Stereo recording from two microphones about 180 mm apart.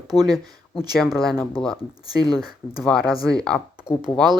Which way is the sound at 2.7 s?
Centre (ahead or behind).